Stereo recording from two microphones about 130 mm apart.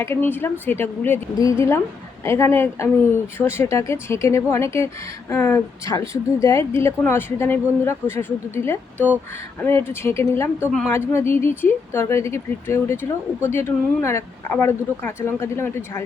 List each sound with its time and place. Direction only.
0.0 s a woman's voice: 15° left (ahead or behind)